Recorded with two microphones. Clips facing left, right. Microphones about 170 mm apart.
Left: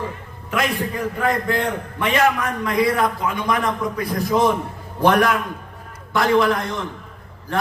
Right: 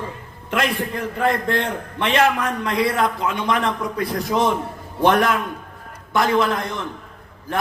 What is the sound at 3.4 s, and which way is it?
Speech, 25° right (ahead or behind).